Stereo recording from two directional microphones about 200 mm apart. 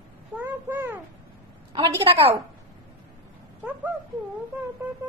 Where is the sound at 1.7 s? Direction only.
25° right (ahead or behind).